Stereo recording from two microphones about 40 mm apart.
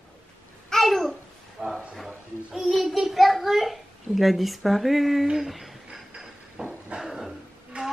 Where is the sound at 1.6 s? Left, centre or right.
Right.